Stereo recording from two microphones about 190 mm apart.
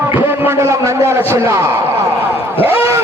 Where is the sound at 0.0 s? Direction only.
10° right (ahead or behind).